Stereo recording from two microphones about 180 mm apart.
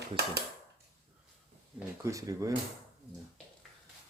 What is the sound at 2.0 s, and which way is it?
Speech, 20° right (ahead or behind).